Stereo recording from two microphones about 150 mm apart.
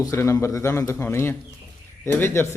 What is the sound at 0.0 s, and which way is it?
A man's voice, 20° left (ahead or behind).